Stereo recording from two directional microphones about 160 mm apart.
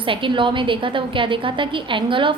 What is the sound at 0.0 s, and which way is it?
A woman's voice, 30° right (ahead or behind).